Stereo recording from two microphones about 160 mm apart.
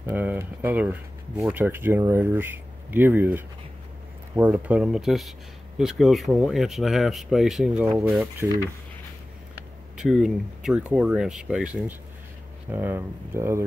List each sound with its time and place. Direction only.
0.0 s speech: 10° right (ahead or behind)
9.9 s speech: 5° right (ahead or behind)